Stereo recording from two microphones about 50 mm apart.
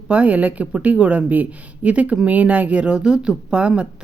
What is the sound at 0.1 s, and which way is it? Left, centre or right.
Speech, right.